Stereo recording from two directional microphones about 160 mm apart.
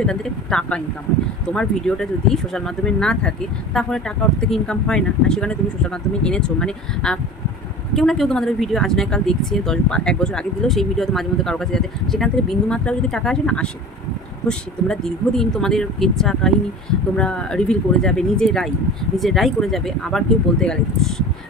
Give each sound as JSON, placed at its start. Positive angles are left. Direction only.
{"t": 0.0, "sound": "speech", "side_deg": 5}